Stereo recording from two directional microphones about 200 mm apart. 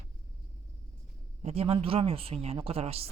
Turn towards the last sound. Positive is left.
turn(degrees=-30)  # may be behind; listen again after turning